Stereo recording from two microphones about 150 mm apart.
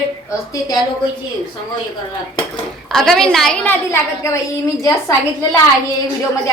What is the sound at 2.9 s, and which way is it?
A woman's voice, centre (ahead or behind).